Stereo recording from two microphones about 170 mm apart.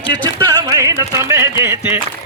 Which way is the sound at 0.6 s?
20° right (ahead or behind).